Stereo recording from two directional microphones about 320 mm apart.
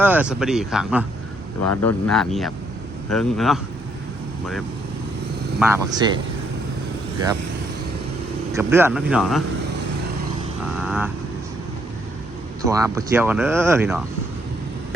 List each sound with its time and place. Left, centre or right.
0.0 s speech: centre
1.7 s speech: left
2.0 s speech: centre
5.5 s speech: centre
8.5 s speech: centre
10.8 s vehicle: centre
12.6 s speech: centre